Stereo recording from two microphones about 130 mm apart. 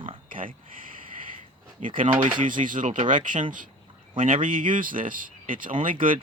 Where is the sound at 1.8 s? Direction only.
70° right (ahead or behind).